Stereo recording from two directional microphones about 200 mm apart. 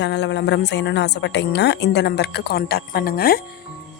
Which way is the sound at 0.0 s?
60° left (ahead or behind).